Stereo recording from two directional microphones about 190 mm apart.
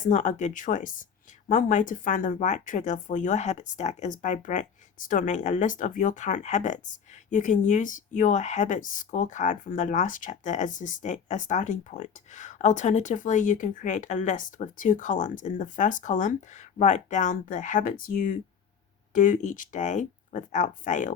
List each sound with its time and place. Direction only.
0.0 s speech: 40° left (ahead or behind)